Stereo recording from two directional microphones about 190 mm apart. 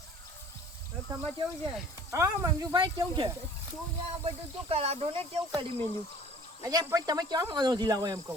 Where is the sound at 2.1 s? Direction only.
15° right (ahead or behind).